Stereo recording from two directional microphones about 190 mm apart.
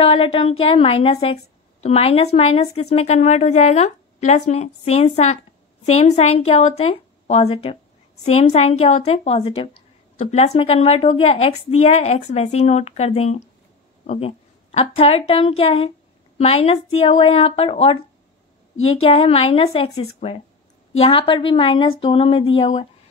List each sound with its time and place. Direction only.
0.0 s a woman's voice: 30° left (ahead or behind)
14.0 s a sound: 35° left (ahead or behind)
15.0 s a woman's voice: 30° left (ahead or behind)